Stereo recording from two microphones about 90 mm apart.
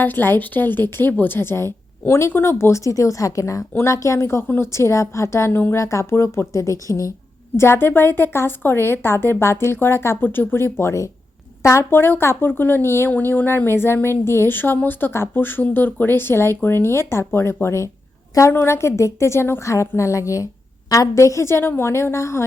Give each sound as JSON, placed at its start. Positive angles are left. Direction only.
{"t": 0.0, "sound": "speech", "side_deg": 20}